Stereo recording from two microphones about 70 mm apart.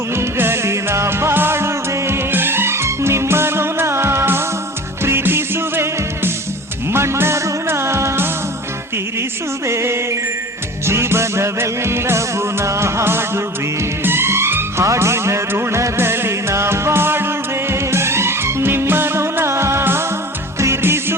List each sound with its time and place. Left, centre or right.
0.2 s music: right
9.6 s music: right